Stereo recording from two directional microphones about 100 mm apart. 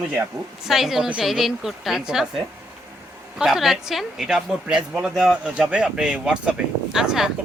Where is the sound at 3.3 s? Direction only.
5° right (ahead or behind).